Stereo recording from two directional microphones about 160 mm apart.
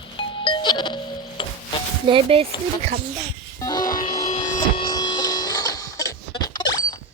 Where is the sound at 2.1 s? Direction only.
35° right (ahead or behind).